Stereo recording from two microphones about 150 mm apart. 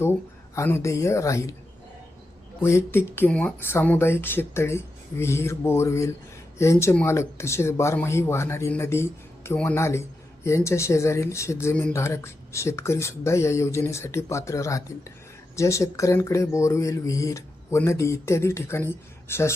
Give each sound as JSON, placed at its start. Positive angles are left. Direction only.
{"t": 0.5, "sound": "speech", "side_deg": 20}
{"t": 2.6, "sound": "speech", "side_deg": 15}